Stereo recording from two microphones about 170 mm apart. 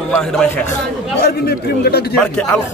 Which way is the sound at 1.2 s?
65° left (ahead or behind).